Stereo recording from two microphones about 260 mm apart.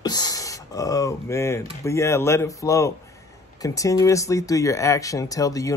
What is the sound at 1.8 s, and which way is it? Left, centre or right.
Speech, centre.